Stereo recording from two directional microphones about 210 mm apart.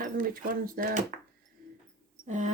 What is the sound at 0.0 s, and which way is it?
Speech, 40° right (ahead or behind).